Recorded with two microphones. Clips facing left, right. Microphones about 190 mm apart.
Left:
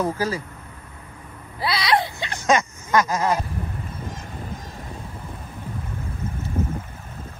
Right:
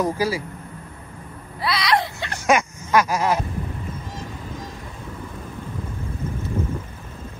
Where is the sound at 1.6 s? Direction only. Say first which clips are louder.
Even; 25° left (ahead or behind).